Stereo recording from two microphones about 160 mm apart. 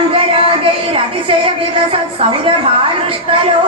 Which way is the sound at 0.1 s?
35° right (ahead or behind).